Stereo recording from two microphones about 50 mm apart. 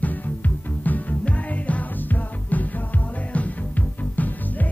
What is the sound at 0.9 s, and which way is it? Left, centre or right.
Music, left.